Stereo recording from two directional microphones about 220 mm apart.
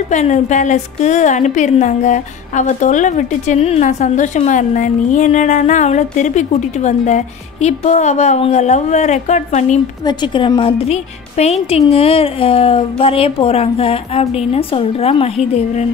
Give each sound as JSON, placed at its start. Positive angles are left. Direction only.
{"t": 0.1, "sound": "a woman's voice", "side_deg": 30}
{"t": 10.0, "sound": "a woman's voice", "side_deg": 20}